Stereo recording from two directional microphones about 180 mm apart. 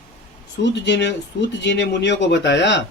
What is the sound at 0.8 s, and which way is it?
A man's voice, 80° left.